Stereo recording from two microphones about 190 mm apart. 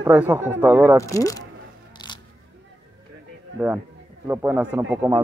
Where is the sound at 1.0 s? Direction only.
15° left (ahead or behind).